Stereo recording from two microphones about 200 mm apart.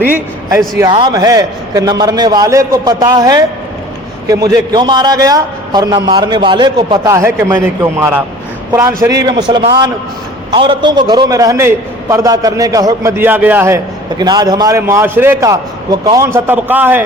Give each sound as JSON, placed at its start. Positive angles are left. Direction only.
{"t": 0.8, "sound": "a man's voice", "side_deg": -20}